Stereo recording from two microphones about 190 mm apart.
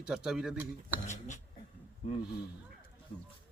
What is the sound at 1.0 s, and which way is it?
Speech, 40° left (ahead or behind).